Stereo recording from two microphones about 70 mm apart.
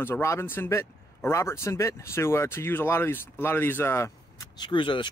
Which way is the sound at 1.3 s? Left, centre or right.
Left.